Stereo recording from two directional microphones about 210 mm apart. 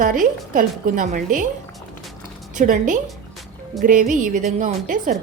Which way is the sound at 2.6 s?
35° right (ahead or behind).